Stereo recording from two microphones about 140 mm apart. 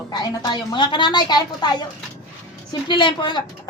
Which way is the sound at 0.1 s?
30° left (ahead or behind).